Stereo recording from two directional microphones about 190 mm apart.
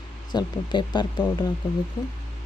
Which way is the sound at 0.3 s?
25° left (ahead or behind).